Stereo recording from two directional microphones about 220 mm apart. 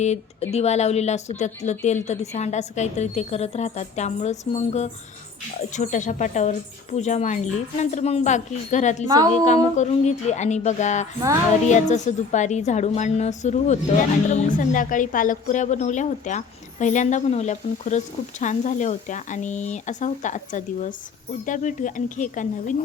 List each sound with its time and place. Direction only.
0.0 s frying: 30° left (ahead or behind)
9.0 s a woman's voice: 15° right (ahead or behind)
9.3 s frying: 30° left (ahead or behind)